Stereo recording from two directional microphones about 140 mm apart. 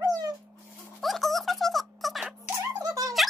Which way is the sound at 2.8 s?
25° right (ahead or behind).